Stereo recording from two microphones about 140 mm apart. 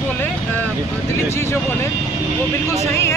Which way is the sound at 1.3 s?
20° left (ahead or behind).